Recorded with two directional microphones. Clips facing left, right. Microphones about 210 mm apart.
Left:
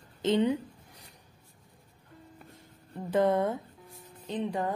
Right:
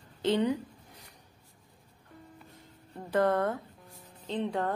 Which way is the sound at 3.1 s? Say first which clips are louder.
Left 1 dB; 20° left (ahead or behind).